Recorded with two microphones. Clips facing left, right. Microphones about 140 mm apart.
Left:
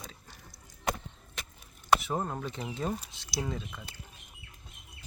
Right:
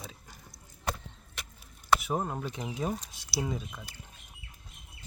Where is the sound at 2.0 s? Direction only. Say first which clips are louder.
Right 1 dB; 5° right (ahead or behind).